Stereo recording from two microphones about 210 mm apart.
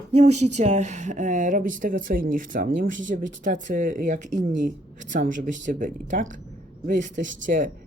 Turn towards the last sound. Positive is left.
turn(degrees=-35)  # may be behind; listen again after turning